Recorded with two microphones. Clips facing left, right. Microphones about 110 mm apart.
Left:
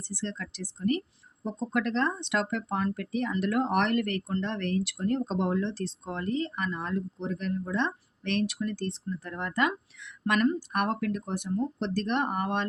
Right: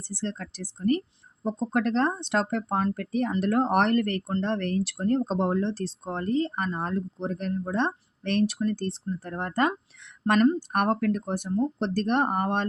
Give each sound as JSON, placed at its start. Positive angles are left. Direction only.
{"t": 0.1, "sound": "speech", "side_deg": -40}